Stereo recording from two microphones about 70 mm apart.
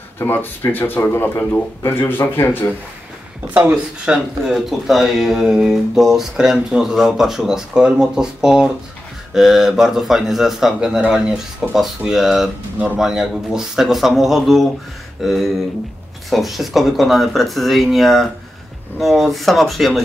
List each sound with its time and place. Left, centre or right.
0.2 s speech: left
3.7 s speech: centre